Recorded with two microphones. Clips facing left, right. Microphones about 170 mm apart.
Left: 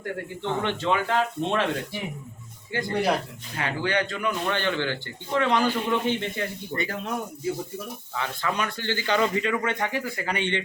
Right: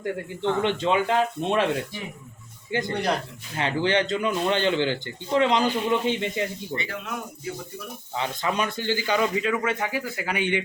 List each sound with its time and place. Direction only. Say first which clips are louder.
0.6 s speech: right 2 dB; 15° right (ahead or behind)
2.9 s speech: left 3 dB; 5° left (ahead or behind)
3.6 s a man's voice: right 3 dB; 25° right (ahead or behind)
6.7 s speech: left 5 dB; 40° left (ahead or behind)
8.1 s speech: right 2 dB; 20° right (ahead or behind)